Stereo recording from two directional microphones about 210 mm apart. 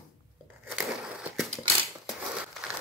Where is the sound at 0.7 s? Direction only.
Centre (ahead or behind).